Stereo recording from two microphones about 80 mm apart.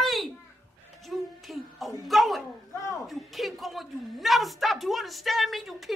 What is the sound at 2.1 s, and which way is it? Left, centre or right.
A woman's voice, centre.